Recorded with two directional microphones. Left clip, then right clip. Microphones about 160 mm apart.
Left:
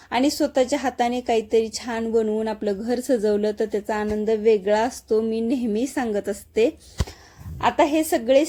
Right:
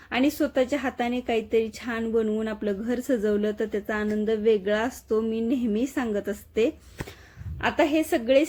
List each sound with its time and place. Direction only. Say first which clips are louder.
0.1 s a woman's voice: left 3 dB; 20° left (ahead or behind)